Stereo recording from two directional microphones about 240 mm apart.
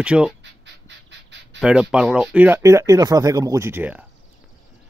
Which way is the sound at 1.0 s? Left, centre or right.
Right.